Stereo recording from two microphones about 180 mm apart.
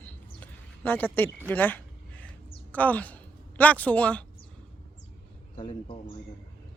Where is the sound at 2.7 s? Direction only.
10° left (ahead or behind).